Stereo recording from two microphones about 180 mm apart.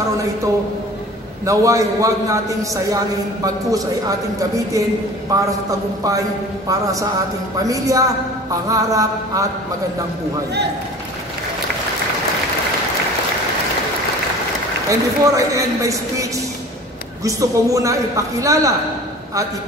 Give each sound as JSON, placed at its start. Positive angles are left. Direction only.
{"t": 1.4, "sound": "a man's voice", "side_deg": -20}
{"t": 14.9, "sound": "a man's voice", "side_deg": -15}